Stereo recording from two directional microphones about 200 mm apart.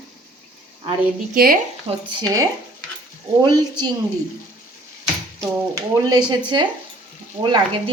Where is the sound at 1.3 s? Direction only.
45° right (ahead or behind).